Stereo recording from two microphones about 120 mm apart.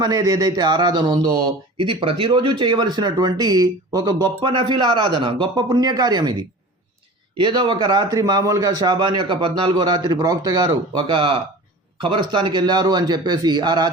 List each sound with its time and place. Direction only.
0.0 s speech: 30° right (ahead or behind)
1.8 s speech: 45° right (ahead or behind)